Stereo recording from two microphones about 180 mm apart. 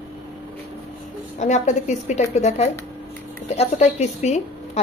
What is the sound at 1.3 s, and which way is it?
A woman's voice, 40° left (ahead or behind).